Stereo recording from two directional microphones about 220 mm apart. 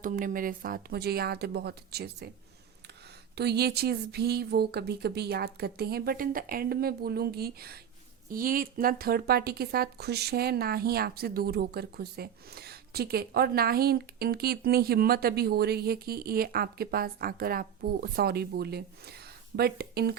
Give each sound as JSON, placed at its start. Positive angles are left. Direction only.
{"t": 0.0, "sound": "speech", "side_deg": -35}
{"t": 3.3, "sound": "speech", "side_deg": -50}